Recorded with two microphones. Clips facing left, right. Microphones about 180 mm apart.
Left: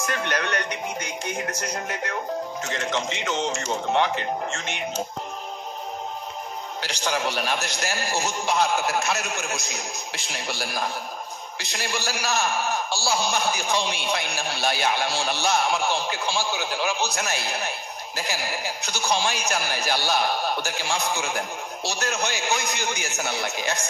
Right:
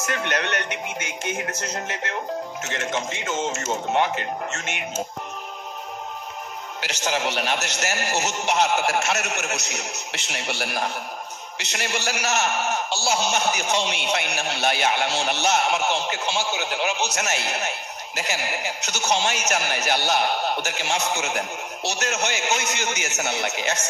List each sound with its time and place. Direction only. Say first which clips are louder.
0.1 s a man's voice: right 2 dB; 20° right (ahead or behind)
3.0 s speech: left 1 dB; 15° left (ahead or behind)
3.6 s a man's voice: right 1 dB; 20° right (ahead or behind)
7.0 s a man's voice: right 1 dB; 20° right (ahead or behind)
8.8 s speech: right 2 dB; 75° right (ahead or behind)
11.8 s a man's voice: right 2 dB; 20° right (ahead or behind)